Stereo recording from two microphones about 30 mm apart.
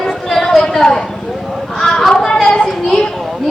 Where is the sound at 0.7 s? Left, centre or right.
Centre.